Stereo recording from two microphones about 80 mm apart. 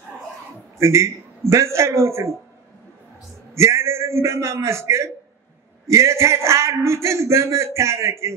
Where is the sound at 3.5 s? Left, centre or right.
Right.